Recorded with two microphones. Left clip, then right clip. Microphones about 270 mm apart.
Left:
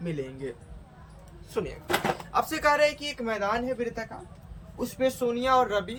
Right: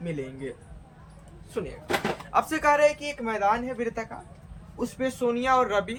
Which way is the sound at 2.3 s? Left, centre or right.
Centre.